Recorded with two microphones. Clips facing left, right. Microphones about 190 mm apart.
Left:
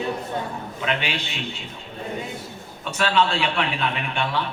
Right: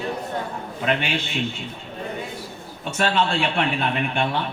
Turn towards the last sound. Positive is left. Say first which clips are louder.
# right 3 dB
turn(degrees=-45)  # may be behind; listen again after turning